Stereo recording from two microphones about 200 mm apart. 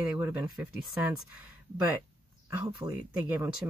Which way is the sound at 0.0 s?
5° right (ahead or behind).